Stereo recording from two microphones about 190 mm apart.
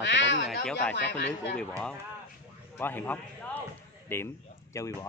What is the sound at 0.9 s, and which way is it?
Speech, 65° left (ahead or behind).